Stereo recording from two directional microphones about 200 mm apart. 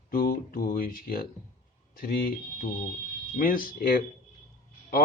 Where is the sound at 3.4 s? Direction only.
45° left (ahead or behind).